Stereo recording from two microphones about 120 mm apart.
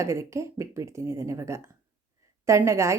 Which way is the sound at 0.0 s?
25° right (ahead or behind).